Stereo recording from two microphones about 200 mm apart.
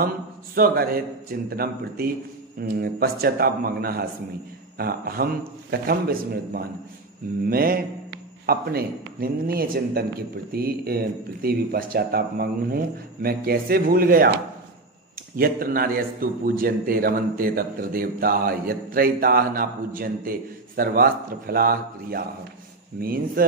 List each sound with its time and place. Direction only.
0.6 s a man's voice: 50° right (ahead or behind)
15.3 s a man's voice: 45° right (ahead or behind)